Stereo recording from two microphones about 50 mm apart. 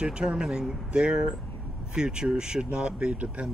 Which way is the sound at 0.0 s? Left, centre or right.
Right.